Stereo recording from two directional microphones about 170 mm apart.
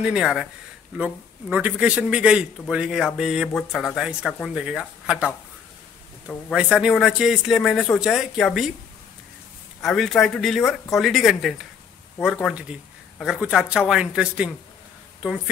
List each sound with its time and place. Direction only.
0.1 s speech: centre (ahead or behind)
6.5 s speech: 5° right (ahead or behind)
9.8 s speech: centre (ahead or behind)